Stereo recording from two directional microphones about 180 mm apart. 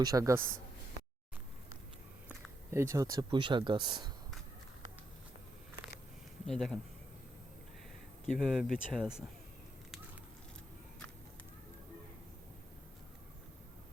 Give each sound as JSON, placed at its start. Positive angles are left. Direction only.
{"t": 0.0, "sound": "speech", "side_deg": -20}
{"t": 2.6, "sound": "speech", "side_deg": -15}
{"t": 6.4, "sound": "speech", "side_deg": 5}
{"t": 8.3, "sound": "speech", "side_deg": 0}